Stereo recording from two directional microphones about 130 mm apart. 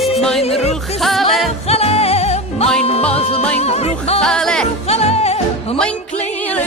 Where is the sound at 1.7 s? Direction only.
50° left (ahead or behind).